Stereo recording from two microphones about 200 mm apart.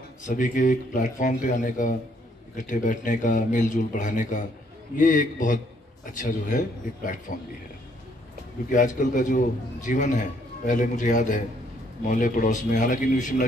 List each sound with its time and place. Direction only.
0.2 s a man's voice: 40° left (ahead or behind)
8.7 s a man's voice: 40° left (ahead or behind)